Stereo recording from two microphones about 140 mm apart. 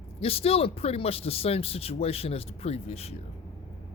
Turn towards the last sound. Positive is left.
turn(degrees=50)  # may be behind; listen again after turning